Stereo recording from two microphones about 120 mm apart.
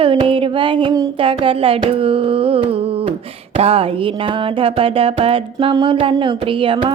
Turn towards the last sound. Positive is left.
turn(degrees=-45)  # may be behind; listen again after turning